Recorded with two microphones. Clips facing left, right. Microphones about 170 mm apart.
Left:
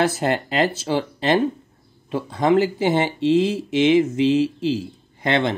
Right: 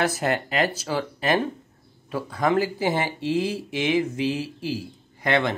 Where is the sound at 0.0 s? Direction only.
30° left (ahead or behind).